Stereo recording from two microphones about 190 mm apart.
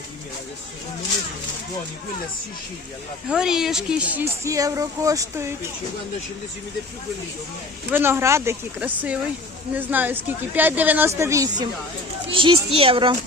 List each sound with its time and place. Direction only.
3.2 s speech: 5° right (ahead or behind)
7.9 s a child's voice: 10° right (ahead or behind); by 13.1 s 25° right (ahead or behind)